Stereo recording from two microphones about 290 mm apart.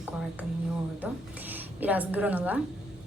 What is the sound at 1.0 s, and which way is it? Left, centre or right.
A woman's voice, centre.